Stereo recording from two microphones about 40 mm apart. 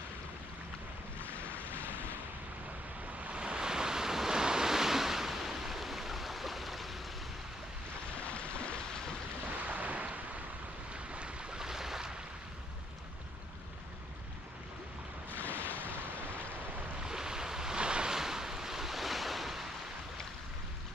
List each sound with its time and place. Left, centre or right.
1.2 s waves: left
3.2 s waves: right; by 7.0 s centre
8.3 s a sound: left
9.6 s a sound: right
11.1 s boat: right; by 12.1 s centre
15.3 s waves: left
17.0 s waves: centre